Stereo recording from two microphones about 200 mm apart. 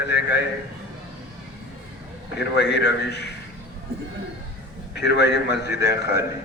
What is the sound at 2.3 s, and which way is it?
Speech, 60° left (ahead or behind).